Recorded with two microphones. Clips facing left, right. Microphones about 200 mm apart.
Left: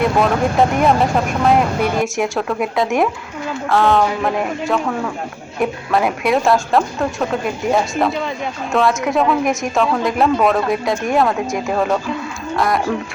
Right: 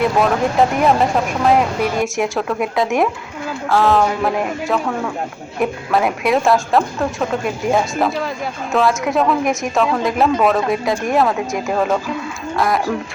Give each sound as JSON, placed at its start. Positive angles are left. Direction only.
{"t": 0.0, "sound": "a woman's voice", "side_deg": 0}